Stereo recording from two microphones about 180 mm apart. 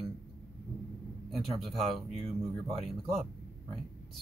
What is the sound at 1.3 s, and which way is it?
Speech, centre (ahead or behind).